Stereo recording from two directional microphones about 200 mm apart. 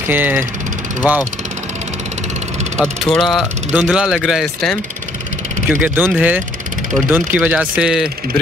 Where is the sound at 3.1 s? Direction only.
Centre (ahead or behind).